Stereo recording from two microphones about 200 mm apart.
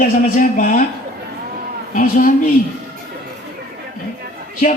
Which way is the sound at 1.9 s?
40° left (ahead or behind).